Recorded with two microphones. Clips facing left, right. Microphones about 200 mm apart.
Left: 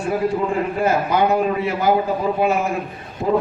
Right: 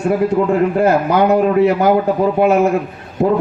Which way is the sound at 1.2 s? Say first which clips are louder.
Right 7 dB; 65° right (ahead or behind).